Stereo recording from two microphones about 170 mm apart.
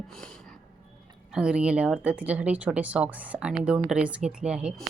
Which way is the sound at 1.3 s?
5° right (ahead or behind).